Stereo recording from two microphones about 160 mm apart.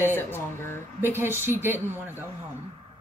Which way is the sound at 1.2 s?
15° right (ahead or behind).